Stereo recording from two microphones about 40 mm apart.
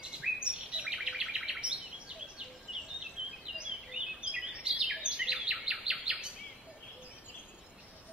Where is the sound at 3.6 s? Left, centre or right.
Centre.